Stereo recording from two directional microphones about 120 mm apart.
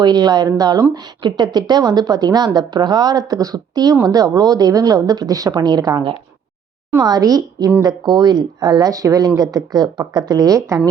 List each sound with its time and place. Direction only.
0.0 s a woman's voice: 35° right (ahead or behind)